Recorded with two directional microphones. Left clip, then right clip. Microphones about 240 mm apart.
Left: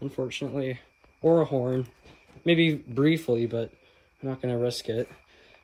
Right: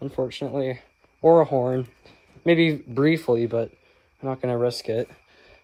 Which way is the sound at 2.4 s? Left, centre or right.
Right.